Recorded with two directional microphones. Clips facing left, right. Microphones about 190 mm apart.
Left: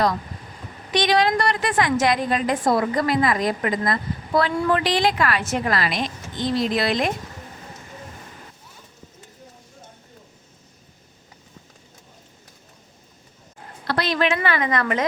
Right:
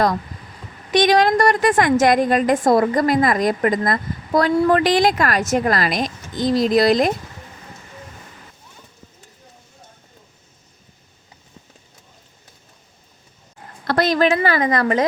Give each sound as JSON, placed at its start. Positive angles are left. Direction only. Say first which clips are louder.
{"t": 0.9, "sound": "a woman's voice", "louder": "right 5 dB", "side_deg": -45}
{"t": 13.8, "sound": "a woman's voice", "louder": "right 5 dB", "side_deg": -45}